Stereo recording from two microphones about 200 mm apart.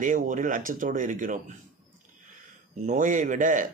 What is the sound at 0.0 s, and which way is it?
Speech, 40° right (ahead or behind).